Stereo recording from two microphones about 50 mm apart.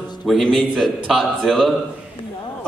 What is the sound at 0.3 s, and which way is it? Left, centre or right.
A man's voice, centre.